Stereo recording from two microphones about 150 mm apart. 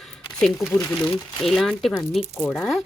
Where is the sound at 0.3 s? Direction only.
Centre (ahead or behind).